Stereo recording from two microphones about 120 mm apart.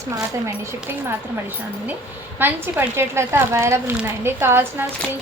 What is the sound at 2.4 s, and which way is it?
A woman's voice, 15° right (ahead or behind).